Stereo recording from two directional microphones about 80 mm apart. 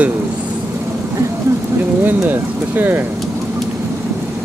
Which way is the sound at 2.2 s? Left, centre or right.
Right.